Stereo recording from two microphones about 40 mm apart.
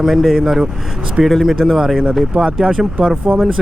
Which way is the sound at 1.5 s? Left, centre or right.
Centre.